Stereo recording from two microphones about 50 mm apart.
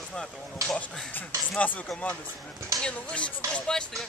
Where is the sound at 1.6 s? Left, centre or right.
Left.